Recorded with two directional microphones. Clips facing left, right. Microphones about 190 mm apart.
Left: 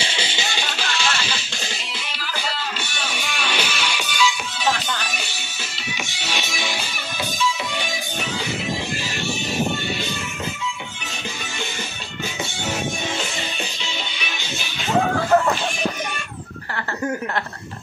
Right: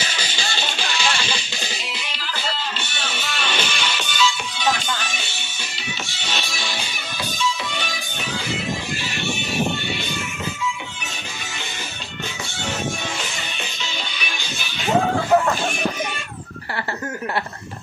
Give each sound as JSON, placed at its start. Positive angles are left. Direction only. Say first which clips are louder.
{"t": 0.0, "sound": "music", "louder": "left 2 dB", "side_deg": 25}
{"t": 6.2, "sound": "music", "louder": "left 2 dB", "side_deg": 15}